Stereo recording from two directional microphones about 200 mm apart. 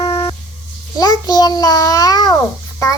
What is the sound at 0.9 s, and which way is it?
Babbling, 20° left (ahead or behind).